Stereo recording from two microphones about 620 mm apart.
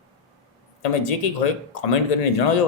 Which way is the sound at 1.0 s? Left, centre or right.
Left.